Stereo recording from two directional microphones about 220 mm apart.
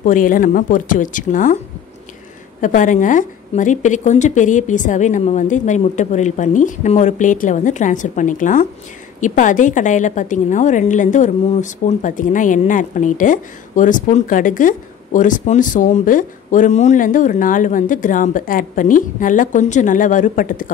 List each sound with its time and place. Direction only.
0.0 s a woman's voice: 35° left (ahead or behind)
2.6 s a woman's voice: 35° left (ahead or behind)